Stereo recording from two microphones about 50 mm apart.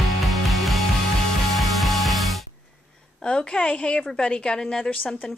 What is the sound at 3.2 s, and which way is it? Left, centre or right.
A woman's voice, left.